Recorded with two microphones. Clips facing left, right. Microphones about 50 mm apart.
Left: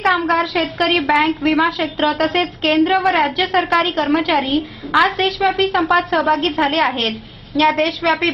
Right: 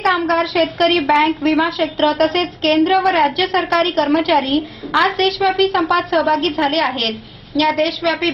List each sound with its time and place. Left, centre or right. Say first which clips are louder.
0.0 s a woman's voice: even; centre
7.0 s a woman's voice: even; left